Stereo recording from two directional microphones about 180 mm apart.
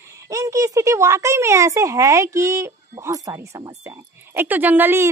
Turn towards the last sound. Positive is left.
turn(degrees=-10)  # may be behind; listen again after turning